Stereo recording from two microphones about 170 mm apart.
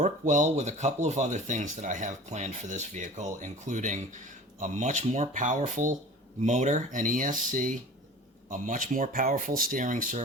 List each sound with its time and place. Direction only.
0.0 s speech: 50° right (ahead or behind)